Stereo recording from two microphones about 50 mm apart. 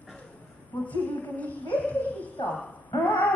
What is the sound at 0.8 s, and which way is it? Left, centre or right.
Speech, left.